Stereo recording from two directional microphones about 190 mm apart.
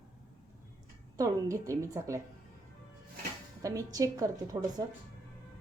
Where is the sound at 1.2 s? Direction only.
15° right (ahead or behind).